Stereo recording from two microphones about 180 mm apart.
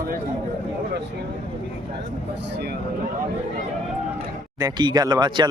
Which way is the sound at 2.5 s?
65° right (ahead or behind).